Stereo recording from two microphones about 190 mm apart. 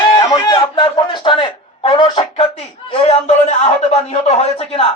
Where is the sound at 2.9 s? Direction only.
35° left (ahead or behind).